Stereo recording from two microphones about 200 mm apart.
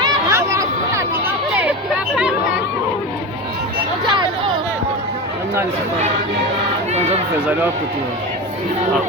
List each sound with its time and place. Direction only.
0.0 s chatter: 15° right (ahead or behind)
4.0 s hubbub: 20° right (ahead or behind)
7.3 s speech: 10° right (ahead or behind)